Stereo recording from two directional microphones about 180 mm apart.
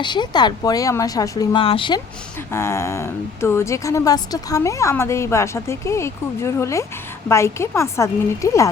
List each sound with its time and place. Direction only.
0.0 s a woman's voice: 25° left (ahead or behind)
2.5 s a woman's voice: 15° left (ahead or behind)